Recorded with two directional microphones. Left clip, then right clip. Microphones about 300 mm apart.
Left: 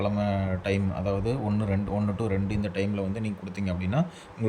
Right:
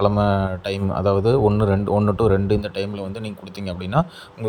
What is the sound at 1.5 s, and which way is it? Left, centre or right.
Speech, right.